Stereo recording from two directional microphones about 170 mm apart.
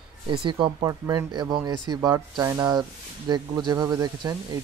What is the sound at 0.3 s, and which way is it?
Speech, 30° right (ahead or behind).